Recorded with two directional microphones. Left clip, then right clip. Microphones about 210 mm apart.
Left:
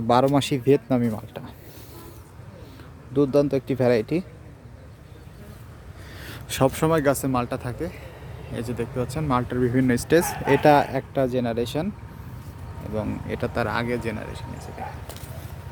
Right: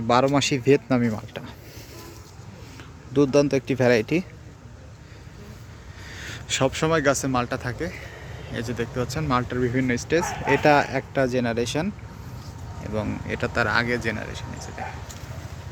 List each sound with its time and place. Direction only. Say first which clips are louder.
0.3 s speech: right 1 dB; 10° left (ahead or behind)
3.1 s speech: right 1 dB; centre (ahead or behind)
6.1 s speech: right 5 dB; 20° left (ahead or behind); by 11.9 s centre (ahead or behind)
12.9 s speech: right 1 dB; 5° left (ahead or behind)